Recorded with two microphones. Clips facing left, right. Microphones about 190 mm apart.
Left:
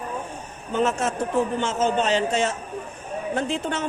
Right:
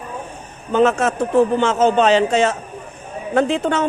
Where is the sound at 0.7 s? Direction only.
80° right.